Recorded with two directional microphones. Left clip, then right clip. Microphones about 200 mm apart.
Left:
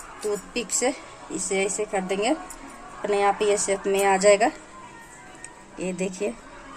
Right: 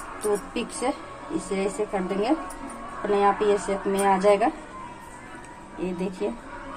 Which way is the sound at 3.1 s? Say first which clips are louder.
Even; 55° left (ahead or behind).